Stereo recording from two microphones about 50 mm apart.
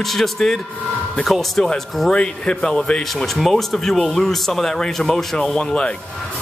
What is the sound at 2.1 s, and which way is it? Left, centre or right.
Speech, centre.